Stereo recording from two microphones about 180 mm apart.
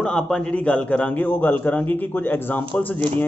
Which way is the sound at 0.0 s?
5° left (ahead or behind).